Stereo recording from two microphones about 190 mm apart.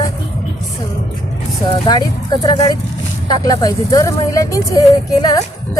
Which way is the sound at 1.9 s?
20° left (ahead or behind).